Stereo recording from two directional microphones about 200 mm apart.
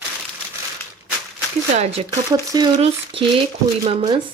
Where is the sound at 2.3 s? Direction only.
20° right (ahead or behind).